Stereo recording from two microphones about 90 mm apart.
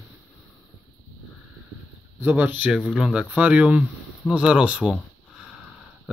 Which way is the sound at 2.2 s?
20° right (ahead or behind).